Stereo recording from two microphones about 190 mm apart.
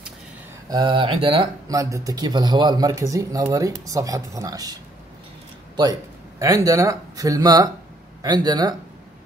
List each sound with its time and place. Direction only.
0.7 s speech: 25° right (ahead or behind)
1.7 s speech: 15° right (ahead or behind)
6.4 s speech: 15° right (ahead or behind)